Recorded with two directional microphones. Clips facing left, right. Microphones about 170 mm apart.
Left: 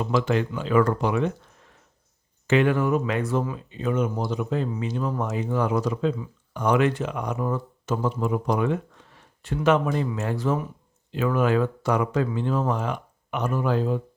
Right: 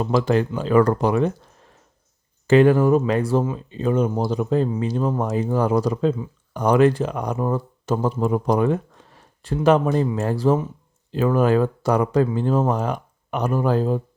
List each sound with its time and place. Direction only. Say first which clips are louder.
0.0 s speech: right 4 dB; 40° right (ahead or behind)
2.5 s speech: right 6 dB; 35° right (ahead or behind)